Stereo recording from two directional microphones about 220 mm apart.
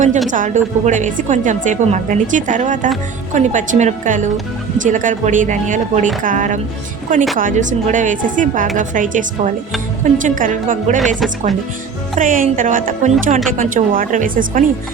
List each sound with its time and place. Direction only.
0.3 s a woman's voice: 35° right (ahead or behind)
12.2 s a woman's voice: 35° right (ahead or behind)